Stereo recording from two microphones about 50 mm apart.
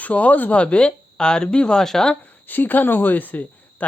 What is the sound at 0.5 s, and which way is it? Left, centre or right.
Speech, left.